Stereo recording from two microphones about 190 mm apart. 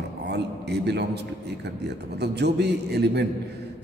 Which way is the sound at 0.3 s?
60° right (ahead or behind).